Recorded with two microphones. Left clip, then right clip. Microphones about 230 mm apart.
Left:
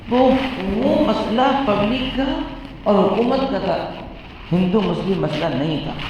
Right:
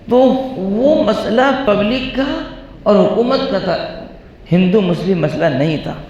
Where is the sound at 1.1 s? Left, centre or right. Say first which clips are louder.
Right 4 dB; right.